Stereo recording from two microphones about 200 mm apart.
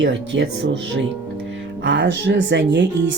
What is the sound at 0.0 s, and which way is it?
Speech, 60° right (ahead or behind).